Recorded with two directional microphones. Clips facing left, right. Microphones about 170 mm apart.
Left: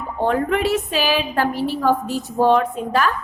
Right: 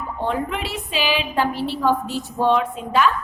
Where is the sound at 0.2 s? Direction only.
45° left (ahead or behind).